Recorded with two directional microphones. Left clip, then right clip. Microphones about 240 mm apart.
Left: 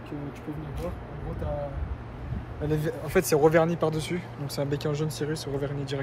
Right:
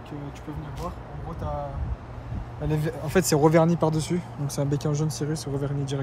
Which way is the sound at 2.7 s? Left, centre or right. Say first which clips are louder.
Even; right.